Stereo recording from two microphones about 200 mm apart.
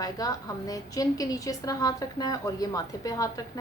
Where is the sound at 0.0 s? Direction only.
15° left (ahead or behind).